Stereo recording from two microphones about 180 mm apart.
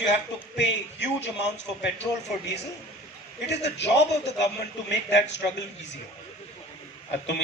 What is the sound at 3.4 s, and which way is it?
Speech, 70° left (ahead or behind).